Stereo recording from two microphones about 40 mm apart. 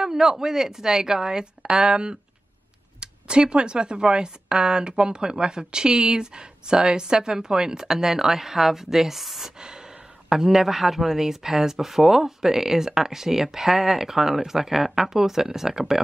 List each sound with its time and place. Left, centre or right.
0.0 s speech: centre
9.6 s a sound: centre
10.3 s speech: centre